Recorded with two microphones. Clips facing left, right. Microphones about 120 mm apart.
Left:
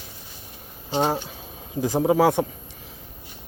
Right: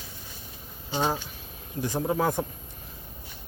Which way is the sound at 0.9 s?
35° left (ahead or behind).